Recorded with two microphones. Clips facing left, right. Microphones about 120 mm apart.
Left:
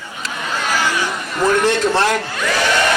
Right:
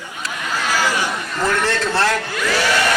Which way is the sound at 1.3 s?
15° left (ahead or behind).